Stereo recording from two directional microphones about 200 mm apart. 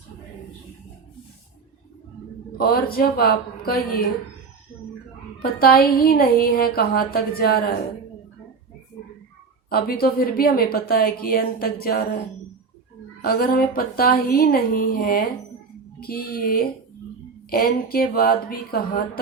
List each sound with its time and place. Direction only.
2.6 s speech: 50° left (ahead or behind)
5.4 s speech: 50° left (ahead or behind)
9.6 s speech: 50° left (ahead or behind)
13.2 s speech: 50° left (ahead or behind)